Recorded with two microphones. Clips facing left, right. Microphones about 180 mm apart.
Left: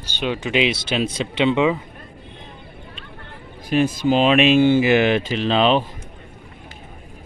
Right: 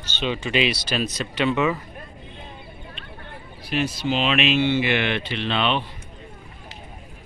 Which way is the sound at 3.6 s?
50° left (ahead or behind).